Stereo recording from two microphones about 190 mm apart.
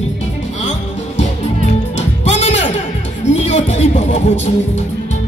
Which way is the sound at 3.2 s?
35° left (ahead or behind).